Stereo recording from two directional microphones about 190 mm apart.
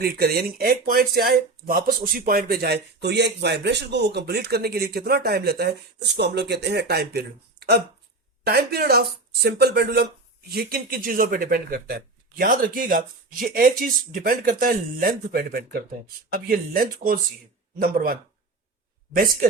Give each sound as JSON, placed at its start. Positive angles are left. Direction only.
{"t": 0.0, "sound": "speech", "side_deg": -55}